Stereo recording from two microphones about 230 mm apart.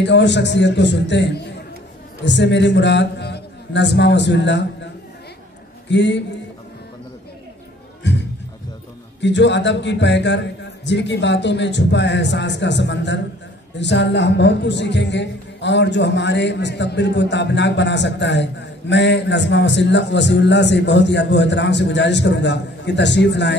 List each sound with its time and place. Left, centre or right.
0.0 s a man's voice: left
5.9 s a man's voice: left
8.0 s a sound: left
9.2 s a man's voice: left